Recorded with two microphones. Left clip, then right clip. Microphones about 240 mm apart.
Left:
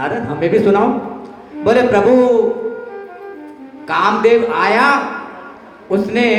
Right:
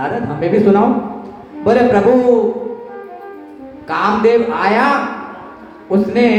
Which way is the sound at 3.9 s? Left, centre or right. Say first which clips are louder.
Left 1 dB; left.